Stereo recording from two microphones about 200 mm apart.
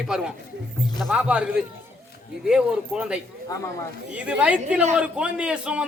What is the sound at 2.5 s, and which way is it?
Speech, 5° right (ahead or behind).